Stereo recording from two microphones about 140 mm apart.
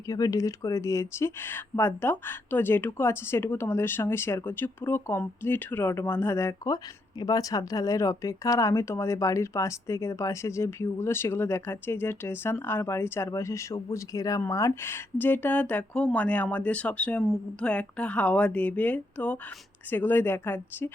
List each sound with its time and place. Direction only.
0.1 s speech: 25° left (ahead or behind)